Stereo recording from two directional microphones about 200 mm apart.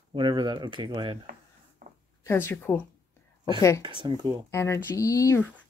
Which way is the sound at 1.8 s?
45° right (ahead or behind).